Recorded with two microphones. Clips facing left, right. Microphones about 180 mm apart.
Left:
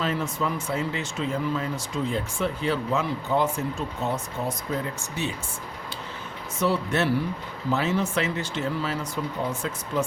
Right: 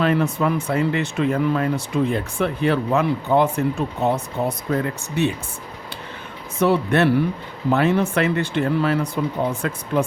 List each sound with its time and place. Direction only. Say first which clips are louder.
0.0 s speech: right 8 dB; 60° right (ahead or behind)
6.6 s speech: right 7 dB; 60° right (ahead or behind)